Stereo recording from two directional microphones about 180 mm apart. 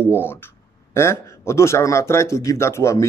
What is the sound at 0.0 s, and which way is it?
Speech, 10° left (ahead or behind).